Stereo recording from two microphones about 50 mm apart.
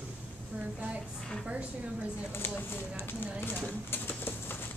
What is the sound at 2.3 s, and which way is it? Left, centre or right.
Speech, left.